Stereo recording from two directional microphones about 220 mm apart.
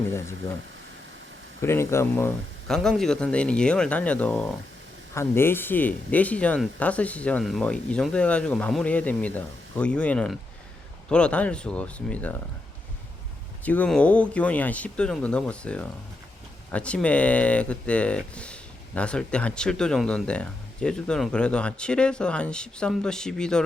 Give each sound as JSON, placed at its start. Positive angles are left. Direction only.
{"t": 1.6, "sound": "speech", "side_deg": 10}
{"t": 13.7, "sound": "speech", "side_deg": 5}